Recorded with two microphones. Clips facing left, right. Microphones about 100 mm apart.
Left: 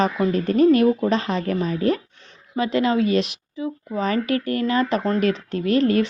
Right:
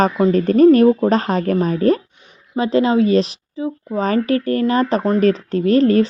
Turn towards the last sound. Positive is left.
turn(degrees=-35)  # may be behind; listen again after turning